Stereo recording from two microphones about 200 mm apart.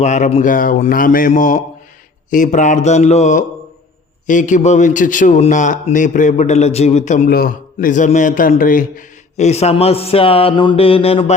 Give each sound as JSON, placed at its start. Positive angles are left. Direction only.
{"t": 0.0, "sound": "a man's voice", "side_deg": 35}
{"t": 7.3, "sound": "a man's voice", "side_deg": 50}